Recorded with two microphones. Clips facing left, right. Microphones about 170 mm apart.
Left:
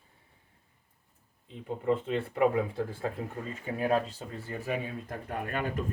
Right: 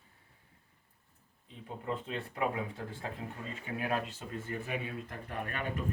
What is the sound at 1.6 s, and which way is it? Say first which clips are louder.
Speech: left 9 dB; 30° left (ahead or behind).